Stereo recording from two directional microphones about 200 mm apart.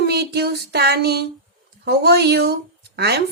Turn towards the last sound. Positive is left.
turn(degrees=-55)  # may be behind; listen again after turning